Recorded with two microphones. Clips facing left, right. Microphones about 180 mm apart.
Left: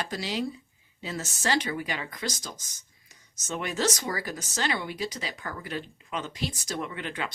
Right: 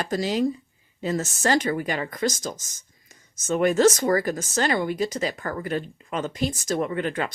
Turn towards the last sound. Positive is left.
turn(degrees=-45)  # may be behind; listen again after turning